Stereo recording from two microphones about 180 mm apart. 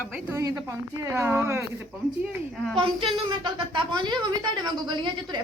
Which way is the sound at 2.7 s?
30° right (ahead or behind).